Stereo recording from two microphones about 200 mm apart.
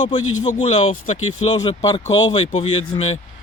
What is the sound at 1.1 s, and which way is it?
Speech, 90° left.